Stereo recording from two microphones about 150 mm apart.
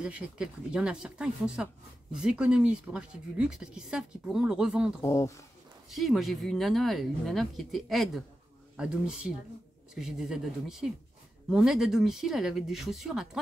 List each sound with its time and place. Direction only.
0.0 s speech: 5° right (ahead or behind)
5.0 s speech: 20° left (ahead or behind)
5.9 s speech: centre (ahead or behind)